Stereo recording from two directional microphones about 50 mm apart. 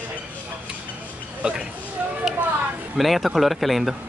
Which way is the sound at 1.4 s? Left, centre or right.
Centre.